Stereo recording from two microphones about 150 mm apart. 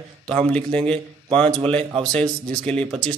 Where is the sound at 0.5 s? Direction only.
5° left (ahead or behind).